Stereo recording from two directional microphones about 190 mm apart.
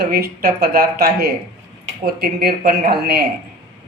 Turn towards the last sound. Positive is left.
turn(degrees=-55)  # may be behind; listen again after turning